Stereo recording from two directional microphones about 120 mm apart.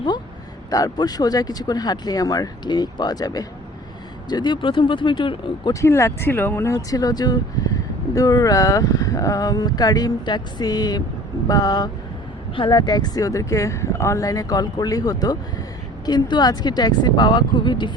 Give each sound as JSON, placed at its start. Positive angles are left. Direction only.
{"t": 0.7, "sound": "speech", "side_deg": 30}
{"t": 5.8, "sound": "speech", "side_deg": 20}
{"t": 6.7, "sound": "speech", "side_deg": 30}